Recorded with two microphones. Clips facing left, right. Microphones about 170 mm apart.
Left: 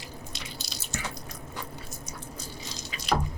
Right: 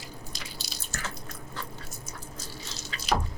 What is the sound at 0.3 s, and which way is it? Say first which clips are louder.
Drip: left 1 dB; 5° left (ahead or behind).